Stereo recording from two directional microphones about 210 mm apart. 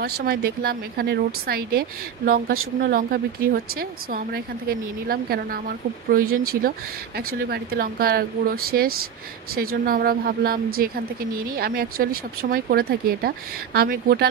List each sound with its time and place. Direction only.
0.0 s a woman's voice: 45° right (ahead or behind)